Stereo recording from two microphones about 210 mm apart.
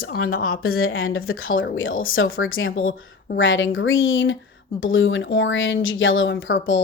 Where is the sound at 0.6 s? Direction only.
85° left.